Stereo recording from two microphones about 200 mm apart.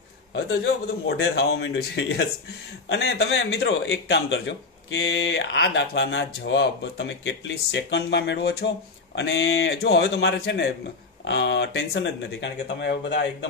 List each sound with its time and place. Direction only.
0.3 s speech: 60° left (ahead or behind)